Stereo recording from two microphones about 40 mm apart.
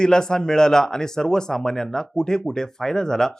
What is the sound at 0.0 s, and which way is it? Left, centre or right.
Speech, centre.